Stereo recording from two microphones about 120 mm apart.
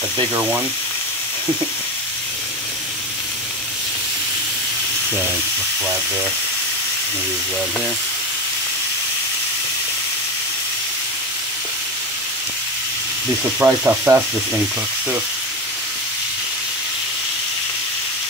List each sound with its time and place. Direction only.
13.6 s sizzle: 15° right (ahead or behind)